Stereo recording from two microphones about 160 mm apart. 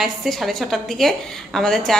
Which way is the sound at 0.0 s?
Centre (ahead or behind).